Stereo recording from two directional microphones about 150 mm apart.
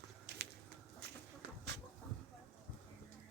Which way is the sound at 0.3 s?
90° right.